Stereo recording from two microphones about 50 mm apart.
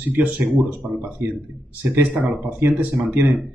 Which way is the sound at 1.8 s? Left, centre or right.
Right.